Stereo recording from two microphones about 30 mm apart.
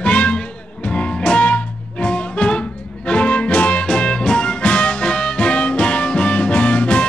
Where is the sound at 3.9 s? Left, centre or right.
Left.